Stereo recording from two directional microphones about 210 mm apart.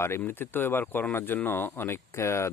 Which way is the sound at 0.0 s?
10° left (ahead or behind).